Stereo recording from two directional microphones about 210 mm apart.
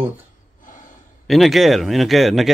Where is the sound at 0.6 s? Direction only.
40° left (ahead or behind).